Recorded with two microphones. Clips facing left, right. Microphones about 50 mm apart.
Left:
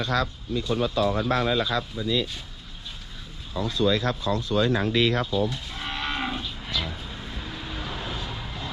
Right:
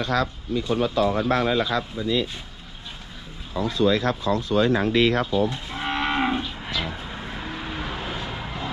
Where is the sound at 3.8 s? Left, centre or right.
Right.